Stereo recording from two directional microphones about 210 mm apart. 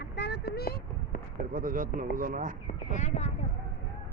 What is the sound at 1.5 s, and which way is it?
A man's voice, 40° right (ahead or behind).